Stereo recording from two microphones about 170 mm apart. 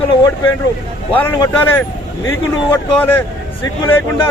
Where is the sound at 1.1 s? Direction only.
10° left (ahead or behind).